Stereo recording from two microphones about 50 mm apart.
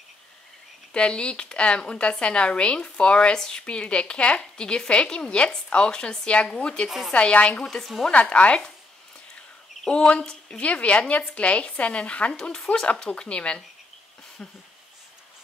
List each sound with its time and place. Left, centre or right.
0.9 s a woman's voice: centre
7.7 s a woman's voice: centre
8.1 s a woman's voice: left
9.8 s a woman's voice: centre
10.7 s a woman's voice: left